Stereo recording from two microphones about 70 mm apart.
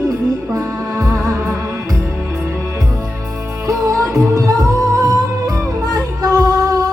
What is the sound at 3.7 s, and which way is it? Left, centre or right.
Music, right.